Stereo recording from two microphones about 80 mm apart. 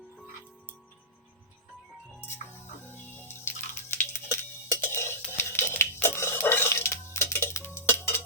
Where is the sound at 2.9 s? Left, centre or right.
Left.